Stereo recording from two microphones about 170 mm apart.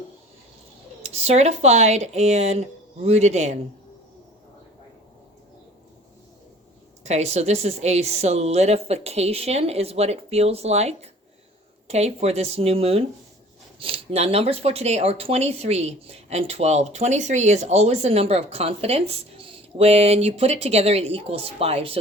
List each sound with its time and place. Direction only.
1.0 s speech: 40° right (ahead or behind)
7.0 s speech: 40° right (ahead or behind)